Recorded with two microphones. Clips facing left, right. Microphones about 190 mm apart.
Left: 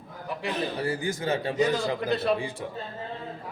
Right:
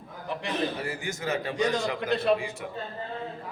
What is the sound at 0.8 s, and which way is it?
A man's voice, 30° left (ahead or behind).